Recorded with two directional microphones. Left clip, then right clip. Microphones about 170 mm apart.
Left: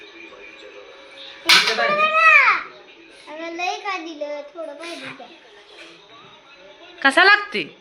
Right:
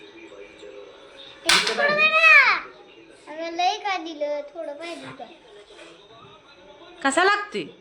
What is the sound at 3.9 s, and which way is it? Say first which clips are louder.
Speech: right 1 dB; 15° right (ahead or behind).